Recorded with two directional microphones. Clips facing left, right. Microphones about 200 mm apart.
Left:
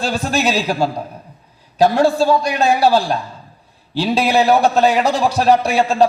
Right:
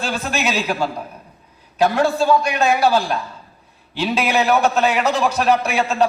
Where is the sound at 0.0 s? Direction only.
35° left (ahead or behind).